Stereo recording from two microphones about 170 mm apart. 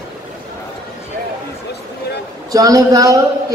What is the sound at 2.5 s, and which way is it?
Speech, 20° right (ahead or behind).